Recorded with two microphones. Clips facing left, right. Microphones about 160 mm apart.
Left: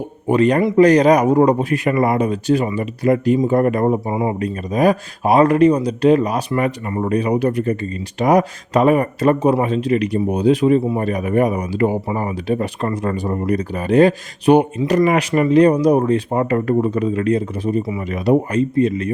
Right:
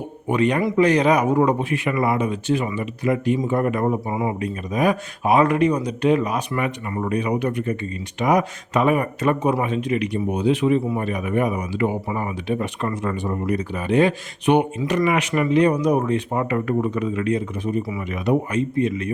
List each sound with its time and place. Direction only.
0.3 s speech: 35° left (ahead or behind)